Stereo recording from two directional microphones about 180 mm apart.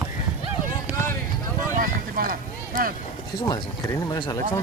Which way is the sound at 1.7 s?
50° right (ahead or behind).